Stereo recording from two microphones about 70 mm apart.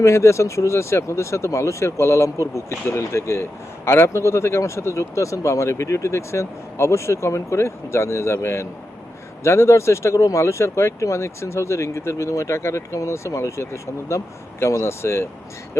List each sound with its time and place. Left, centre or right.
0.0 s speech: left